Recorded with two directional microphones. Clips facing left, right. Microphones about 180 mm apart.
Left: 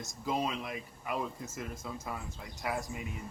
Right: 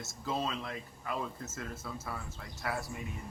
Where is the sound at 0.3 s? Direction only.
15° left (ahead or behind).